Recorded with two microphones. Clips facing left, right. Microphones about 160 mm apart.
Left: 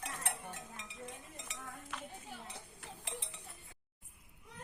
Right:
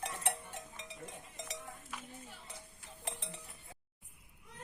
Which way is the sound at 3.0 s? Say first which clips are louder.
Right 4 dB; 40° right (ahead or behind).